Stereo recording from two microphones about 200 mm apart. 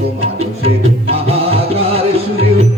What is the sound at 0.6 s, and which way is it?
Music, 30° right (ahead or behind).